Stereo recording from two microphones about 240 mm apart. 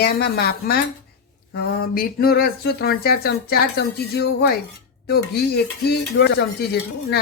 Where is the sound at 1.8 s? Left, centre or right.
Left.